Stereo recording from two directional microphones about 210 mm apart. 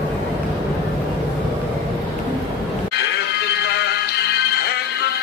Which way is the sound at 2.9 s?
50° left (ahead or behind).